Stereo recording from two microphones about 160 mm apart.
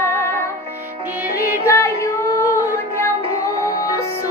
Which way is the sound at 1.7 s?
20° left (ahead or behind).